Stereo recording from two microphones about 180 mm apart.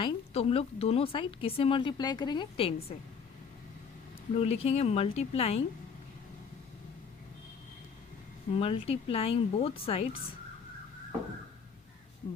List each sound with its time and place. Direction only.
0.0 s speech: 35° left (ahead or behind)
4.4 s speech: 35° left (ahead or behind)
8.5 s speech: 30° left (ahead or behind)